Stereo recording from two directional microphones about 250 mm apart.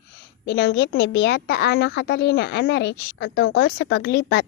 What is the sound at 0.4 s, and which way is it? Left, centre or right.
A woman's voice, left.